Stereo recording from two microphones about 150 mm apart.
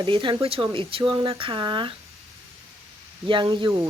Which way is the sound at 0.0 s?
35° right (ahead or behind).